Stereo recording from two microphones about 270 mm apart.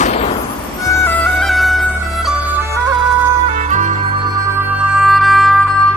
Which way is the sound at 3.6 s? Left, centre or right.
Right.